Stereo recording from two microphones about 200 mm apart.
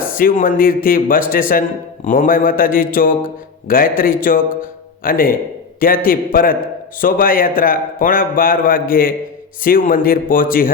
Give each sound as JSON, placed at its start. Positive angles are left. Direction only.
{"t": 0.0, "sound": "a man's voice", "side_deg": 45}